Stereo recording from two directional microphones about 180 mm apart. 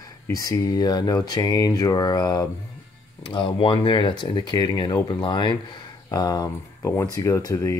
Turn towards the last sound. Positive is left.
turn(degrees=20)  # may be behind; listen again after turning